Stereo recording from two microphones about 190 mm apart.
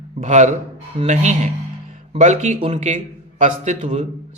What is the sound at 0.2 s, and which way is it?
A man's voice, 40° right (ahead or behind).